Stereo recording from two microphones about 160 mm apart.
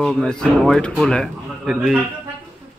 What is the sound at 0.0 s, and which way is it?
Speech, centre (ahead or behind).